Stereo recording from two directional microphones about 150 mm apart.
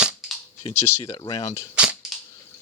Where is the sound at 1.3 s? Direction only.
20° left (ahead or behind).